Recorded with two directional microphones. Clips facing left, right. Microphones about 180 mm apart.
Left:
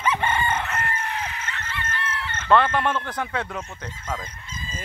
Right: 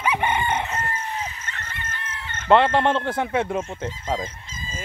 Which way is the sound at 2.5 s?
25° right (ahead or behind).